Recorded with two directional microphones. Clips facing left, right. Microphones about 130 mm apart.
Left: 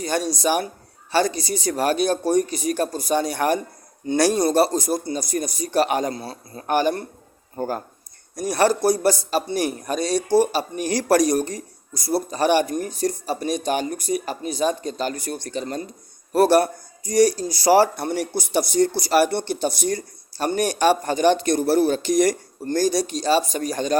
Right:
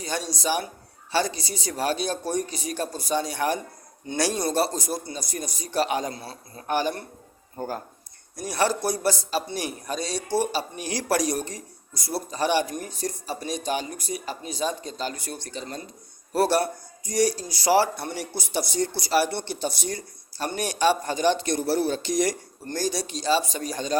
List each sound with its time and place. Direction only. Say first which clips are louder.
0.0 s a man's voice: left 6 dB; 50° left (ahead or behind)
8.4 s a man's voice: left 6 dB; 50° left (ahead or behind)
12.3 s a man's voice: left 4 dB; 55° left (ahead or behind)